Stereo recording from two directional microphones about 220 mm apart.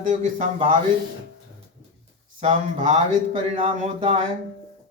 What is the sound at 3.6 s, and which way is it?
Speech, 30° right (ahead or behind).